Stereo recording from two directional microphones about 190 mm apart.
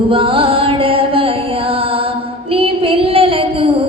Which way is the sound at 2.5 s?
30° right (ahead or behind).